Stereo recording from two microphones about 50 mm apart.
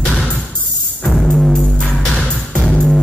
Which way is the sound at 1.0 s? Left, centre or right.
Centre.